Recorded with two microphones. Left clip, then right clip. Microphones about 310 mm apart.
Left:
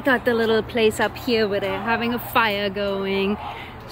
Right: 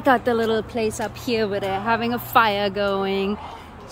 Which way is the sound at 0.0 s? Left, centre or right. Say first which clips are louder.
Right 1 dB; centre.